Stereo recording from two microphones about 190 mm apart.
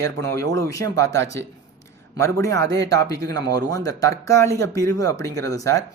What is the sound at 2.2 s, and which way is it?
Speech, 15° left (ahead or behind).